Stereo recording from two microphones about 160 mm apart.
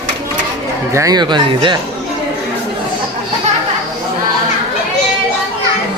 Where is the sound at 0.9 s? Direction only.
25° right (ahead or behind).